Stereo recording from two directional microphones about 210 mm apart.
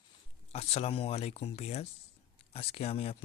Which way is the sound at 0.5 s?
30° left (ahead or behind).